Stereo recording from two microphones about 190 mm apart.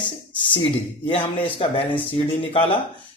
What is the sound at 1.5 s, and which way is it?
Speech, 30° left (ahead or behind).